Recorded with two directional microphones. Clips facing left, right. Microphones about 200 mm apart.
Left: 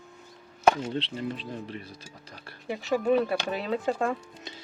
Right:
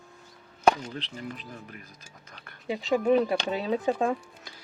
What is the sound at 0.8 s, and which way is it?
Speech, 25° left (ahead or behind).